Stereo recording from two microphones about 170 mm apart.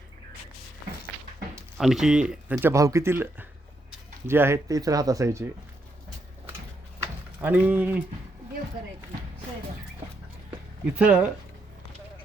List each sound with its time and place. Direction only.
1.8 s speech: centre (ahead or behind); by 5.5 s 15° right (ahead or behind)
7.0 s a sound: 10° right (ahead or behind)
10.9 s speech: 10° right (ahead or behind)